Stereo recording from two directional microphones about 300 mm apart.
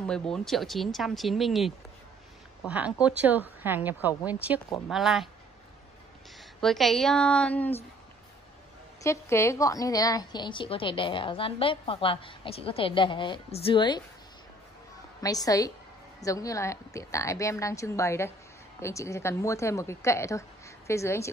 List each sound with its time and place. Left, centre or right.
0.0 s speech: centre
2.7 s speech: centre
6.6 s speech: centre
9.0 s a woman's voice: centre
15.2 s a woman's voice: centre